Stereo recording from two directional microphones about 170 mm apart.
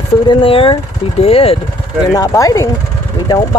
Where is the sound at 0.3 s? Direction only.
30° left (ahead or behind).